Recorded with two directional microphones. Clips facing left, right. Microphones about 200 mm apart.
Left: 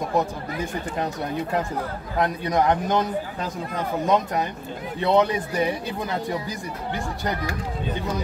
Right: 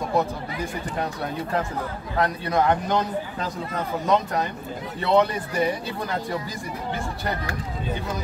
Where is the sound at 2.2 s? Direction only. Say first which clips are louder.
Left 1 dB; 15° left (ahead or behind).